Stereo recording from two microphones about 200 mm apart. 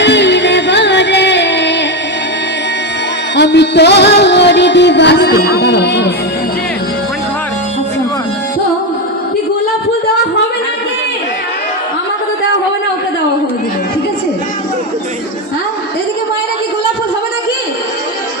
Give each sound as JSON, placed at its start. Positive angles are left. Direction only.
{"t": 0.0, "sound": "music", "side_deg": 60}
{"t": 3.3, "sound": "music", "side_deg": 60}